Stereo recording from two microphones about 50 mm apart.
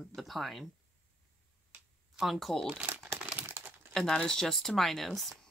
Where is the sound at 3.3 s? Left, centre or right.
Right.